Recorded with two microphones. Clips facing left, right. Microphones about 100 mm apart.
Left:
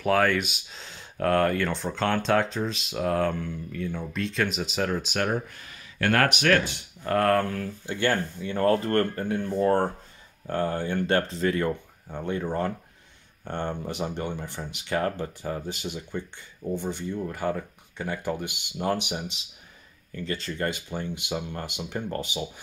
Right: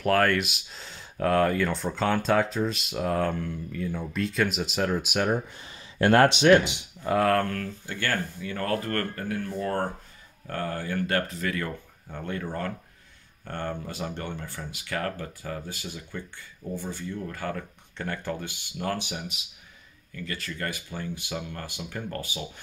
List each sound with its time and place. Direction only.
0.0 s speech: centre (ahead or behind)
5.6 s speech: 25° right (ahead or behind)
7.0 s speech: 5° right (ahead or behind)
7.6 s speech: 20° left (ahead or behind)